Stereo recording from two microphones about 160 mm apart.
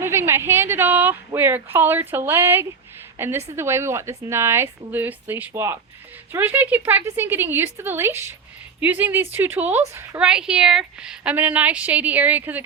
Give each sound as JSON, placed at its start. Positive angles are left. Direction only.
{"t": 0.0, "sound": "speech", "side_deg": -15}